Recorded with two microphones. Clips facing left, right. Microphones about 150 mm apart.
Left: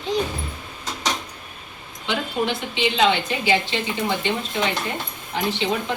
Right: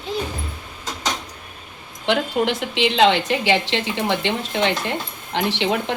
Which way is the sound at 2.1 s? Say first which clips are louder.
Right 4 dB; 90° right.